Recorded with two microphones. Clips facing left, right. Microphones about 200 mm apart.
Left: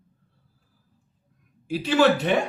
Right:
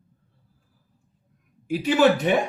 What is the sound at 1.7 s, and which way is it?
Speech, 15° right (ahead or behind).